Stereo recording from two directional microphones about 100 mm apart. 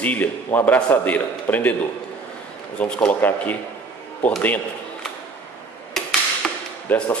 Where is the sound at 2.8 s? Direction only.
15° left (ahead or behind).